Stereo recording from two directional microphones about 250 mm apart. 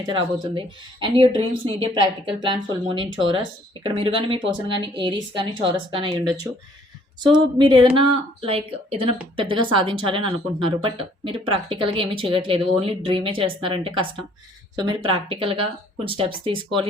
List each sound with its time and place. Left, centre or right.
0.0 s a woman's voice: centre